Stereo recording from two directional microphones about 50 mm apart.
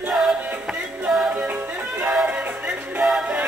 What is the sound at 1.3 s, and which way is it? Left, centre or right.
Music, right.